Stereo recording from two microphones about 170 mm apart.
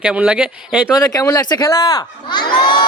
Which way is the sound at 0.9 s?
20° left (ahead or behind).